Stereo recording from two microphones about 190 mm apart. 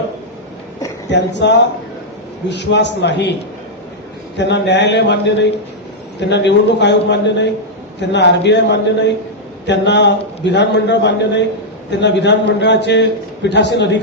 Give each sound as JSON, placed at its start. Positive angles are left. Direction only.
{"t": 1.1, "sound": "a man's voice", "side_deg": 65}
{"t": 4.4, "sound": "a man's voice", "side_deg": 65}